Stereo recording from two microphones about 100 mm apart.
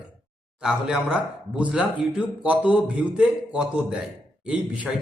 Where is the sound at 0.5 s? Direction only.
5° right (ahead or behind).